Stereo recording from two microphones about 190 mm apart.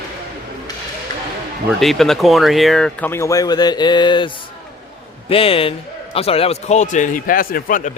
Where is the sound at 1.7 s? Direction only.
Centre (ahead or behind).